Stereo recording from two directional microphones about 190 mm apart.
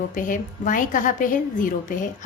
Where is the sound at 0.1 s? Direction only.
45° left (ahead or behind).